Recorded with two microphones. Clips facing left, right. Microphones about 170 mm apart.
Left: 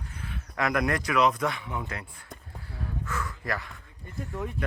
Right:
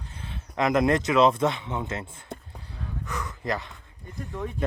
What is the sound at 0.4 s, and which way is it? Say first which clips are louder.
Speech: right 5 dB; 20° right (ahead or behind).